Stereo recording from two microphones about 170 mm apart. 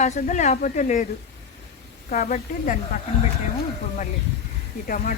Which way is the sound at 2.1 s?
50° left (ahead or behind).